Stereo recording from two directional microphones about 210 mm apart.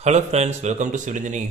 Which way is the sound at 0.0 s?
30° right (ahead or behind).